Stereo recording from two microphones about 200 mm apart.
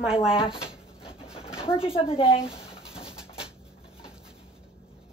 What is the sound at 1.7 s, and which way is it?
Speech, 30° left (ahead or behind).